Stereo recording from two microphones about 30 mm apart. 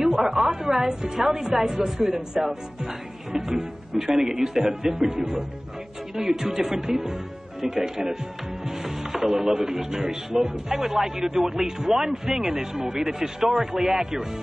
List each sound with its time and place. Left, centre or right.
0.0 s speech: centre
3.9 s speech: centre
6.1 s speech: centre